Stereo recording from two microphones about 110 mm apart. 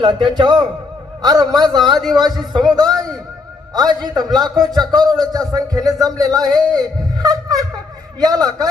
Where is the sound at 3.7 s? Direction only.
40° right (ahead or behind).